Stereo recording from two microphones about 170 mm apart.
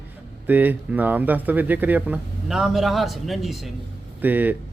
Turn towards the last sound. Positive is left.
turn(degrees=-10)  # may be behind; listen again after turning